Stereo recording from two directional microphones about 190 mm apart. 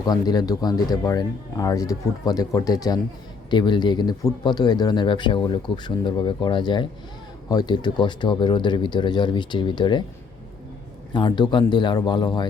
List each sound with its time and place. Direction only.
0.0 s speech: 20° left (ahead or behind)
11.1 s speech: 25° left (ahead or behind)